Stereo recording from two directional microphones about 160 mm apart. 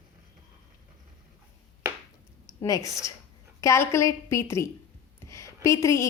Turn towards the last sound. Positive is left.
turn(degrees=20)  # may be behind; listen again after turning